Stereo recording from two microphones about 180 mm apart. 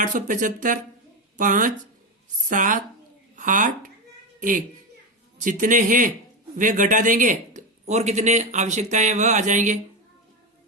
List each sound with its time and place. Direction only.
0.0 s speech: 45° right (ahead or behind)